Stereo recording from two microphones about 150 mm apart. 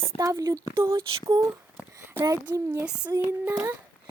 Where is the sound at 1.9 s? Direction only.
15° right (ahead or behind).